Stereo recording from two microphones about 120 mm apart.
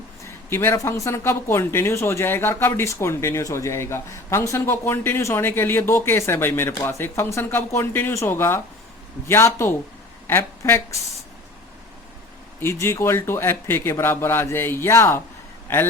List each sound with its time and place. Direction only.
0.5 s speech: 25° left (ahead or behind)
12.5 s speech: 20° left (ahead or behind)